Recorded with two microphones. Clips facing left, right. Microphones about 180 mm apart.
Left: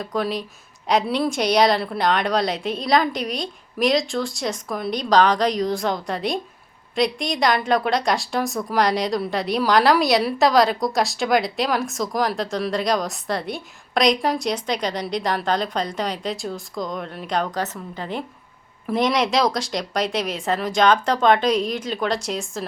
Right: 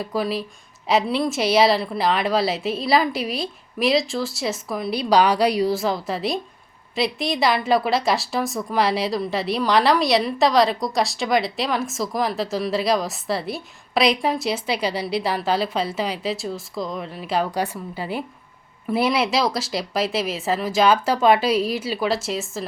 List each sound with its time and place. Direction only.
0.0 s a woman's voice: 5° right (ahead or behind)